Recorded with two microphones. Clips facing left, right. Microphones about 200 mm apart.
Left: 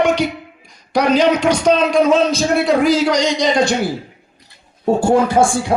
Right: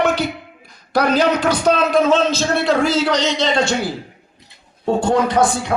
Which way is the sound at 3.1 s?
10° left (ahead or behind).